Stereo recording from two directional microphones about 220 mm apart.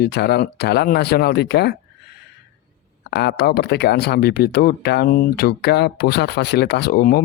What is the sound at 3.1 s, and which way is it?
Speech, 50° left (ahead or behind).